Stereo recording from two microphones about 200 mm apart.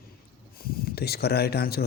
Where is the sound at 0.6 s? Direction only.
50° left (ahead or behind).